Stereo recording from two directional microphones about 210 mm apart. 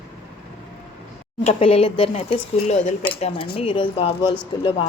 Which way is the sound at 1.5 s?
30° left (ahead or behind).